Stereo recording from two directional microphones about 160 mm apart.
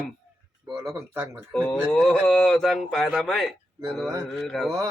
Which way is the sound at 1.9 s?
5° left (ahead or behind).